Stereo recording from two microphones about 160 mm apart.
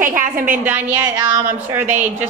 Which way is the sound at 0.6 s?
10° right (ahead or behind).